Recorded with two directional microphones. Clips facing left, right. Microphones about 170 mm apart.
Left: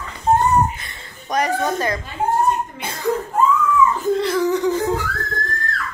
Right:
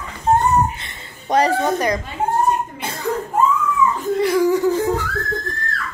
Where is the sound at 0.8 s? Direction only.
25° right (ahead or behind).